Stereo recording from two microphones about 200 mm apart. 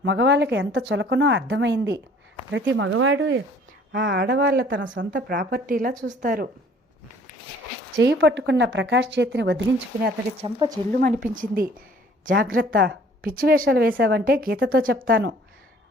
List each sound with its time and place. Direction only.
0.0 s speech: 60° right (ahead or behind)
3.9 s speech: 60° right (ahead or behind)
5.1 s a woman's voice: 45° right (ahead or behind)
7.9 s speech: 60° right (ahead or behind)
10.4 s speech: 25° right (ahead or behind)
10.9 s a woman's voice: 45° right (ahead or behind)